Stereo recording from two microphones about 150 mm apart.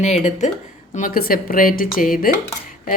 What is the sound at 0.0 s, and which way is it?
Speech, 50° left (ahead or behind).